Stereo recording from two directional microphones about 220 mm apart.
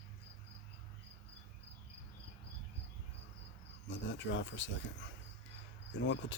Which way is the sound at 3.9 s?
55° left (ahead or behind).